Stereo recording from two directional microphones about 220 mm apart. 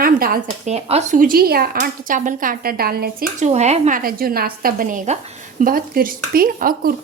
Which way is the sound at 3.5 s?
30° right (ahead or behind).